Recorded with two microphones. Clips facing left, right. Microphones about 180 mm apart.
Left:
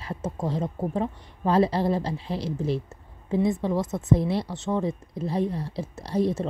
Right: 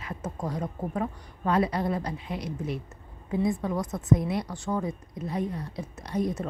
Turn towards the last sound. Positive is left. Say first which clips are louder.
# left 4 dB
turn(degrees=30)  # may be behind; listen again after turning